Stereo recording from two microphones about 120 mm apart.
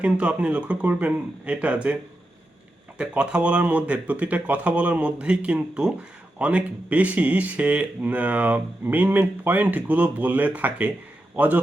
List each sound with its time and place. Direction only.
0.0 s speech: 10° right (ahead or behind)
3.0 s speech: 10° right (ahead or behind)